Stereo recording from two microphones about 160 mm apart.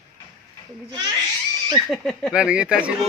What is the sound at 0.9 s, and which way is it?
Speech, 25° right (ahead or behind).